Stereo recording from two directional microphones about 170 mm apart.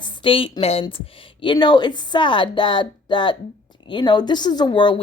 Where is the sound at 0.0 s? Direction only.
30° left (ahead or behind).